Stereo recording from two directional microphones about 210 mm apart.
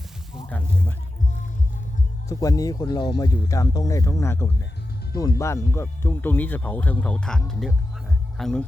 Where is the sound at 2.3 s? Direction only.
15° left (ahead or behind).